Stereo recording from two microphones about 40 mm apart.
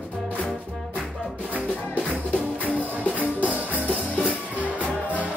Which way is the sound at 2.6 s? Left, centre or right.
Right.